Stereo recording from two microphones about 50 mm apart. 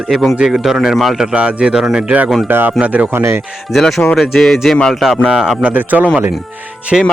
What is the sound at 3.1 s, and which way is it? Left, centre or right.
Speech, right.